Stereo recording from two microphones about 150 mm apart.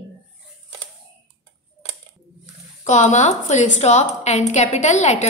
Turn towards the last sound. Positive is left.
turn(degrees=50)  # may be behind; listen again after turning